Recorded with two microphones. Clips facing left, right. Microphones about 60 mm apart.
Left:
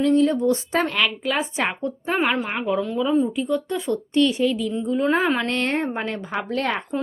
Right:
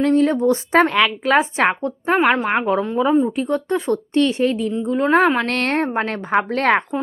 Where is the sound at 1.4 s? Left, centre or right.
Right.